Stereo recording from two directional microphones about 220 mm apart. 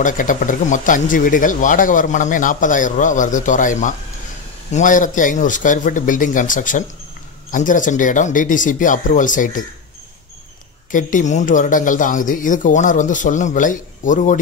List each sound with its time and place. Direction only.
0.0 s speech: 35° left (ahead or behind)
10.9 s speech: 35° left (ahead or behind)